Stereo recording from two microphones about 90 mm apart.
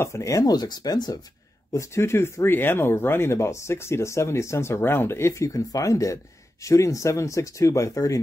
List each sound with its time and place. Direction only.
0.0 s speech: 35° left (ahead or behind); by 1.1 s 50° left (ahead or behind)
1.7 s speech: 35° left (ahead or behind)